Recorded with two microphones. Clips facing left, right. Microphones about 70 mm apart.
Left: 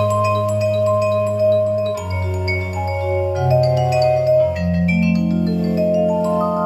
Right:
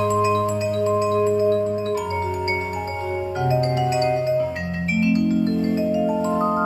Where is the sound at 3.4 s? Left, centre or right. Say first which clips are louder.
Left 4 dB; right.